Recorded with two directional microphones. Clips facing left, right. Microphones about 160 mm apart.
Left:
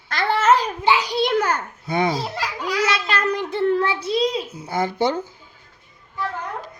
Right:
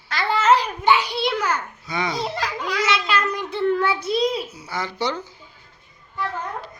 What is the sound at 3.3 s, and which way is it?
Child singing, 50° left (ahead or behind).